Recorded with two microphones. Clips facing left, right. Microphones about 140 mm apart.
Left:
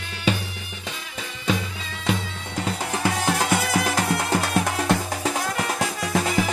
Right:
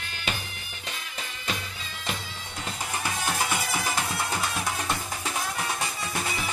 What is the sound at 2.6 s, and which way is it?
Music, 85° left.